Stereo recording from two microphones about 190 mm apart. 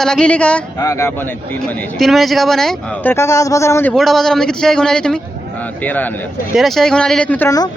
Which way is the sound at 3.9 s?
Centre (ahead or behind).